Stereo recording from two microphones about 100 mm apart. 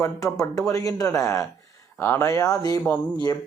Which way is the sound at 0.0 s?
35° left (ahead or behind).